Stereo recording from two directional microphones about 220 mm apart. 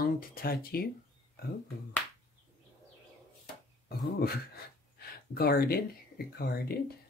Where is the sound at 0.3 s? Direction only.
40° left (ahead or behind).